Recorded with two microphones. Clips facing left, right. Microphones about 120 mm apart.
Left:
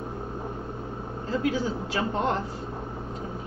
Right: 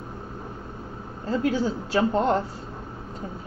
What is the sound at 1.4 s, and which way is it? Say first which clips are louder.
Speech: right 3 dB; 35° right (ahead or behind).